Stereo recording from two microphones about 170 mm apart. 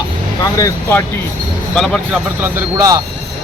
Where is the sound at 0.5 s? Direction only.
15° left (ahead or behind).